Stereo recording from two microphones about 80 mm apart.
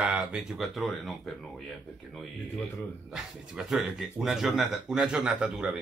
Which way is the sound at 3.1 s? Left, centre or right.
Centre.